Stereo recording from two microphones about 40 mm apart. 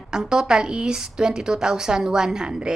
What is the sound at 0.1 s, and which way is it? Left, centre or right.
A woman's voice, centre.